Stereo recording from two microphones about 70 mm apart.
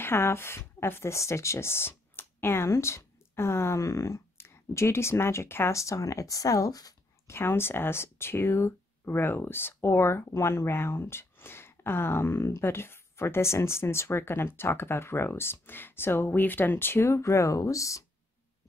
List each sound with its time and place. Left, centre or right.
0.0 s speech: left
7.2 s speech: left